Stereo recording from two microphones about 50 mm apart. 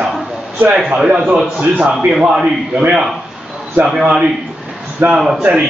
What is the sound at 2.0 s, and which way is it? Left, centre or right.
Speech, centre.